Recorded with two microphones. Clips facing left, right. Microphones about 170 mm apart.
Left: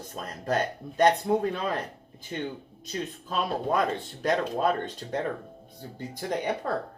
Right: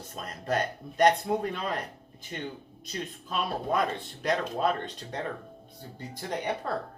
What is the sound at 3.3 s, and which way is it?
Speech, 45° left (ahead or behind).